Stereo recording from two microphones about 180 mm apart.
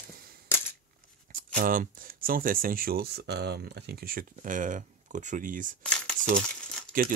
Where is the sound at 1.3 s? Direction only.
50° right (ahead or behind).